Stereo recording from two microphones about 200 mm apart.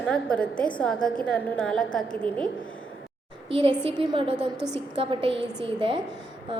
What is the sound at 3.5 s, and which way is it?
A woman's voice, 25° right (ahead or behind).